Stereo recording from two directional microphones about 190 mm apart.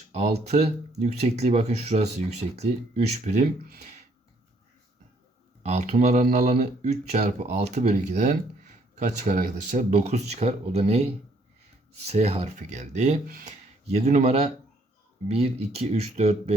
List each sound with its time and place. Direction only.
0.1 s speech: 35° right (ahead or behind)
5.6 s speech: 35° right (ahead or behind)
12.0 s speech: 35° right (ahead or behind)